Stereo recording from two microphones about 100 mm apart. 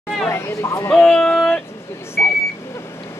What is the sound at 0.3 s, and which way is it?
Speech, 25° left (ahead or behind).